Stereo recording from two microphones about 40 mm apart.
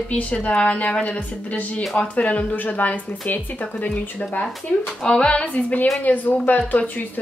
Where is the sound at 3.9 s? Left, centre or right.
Left.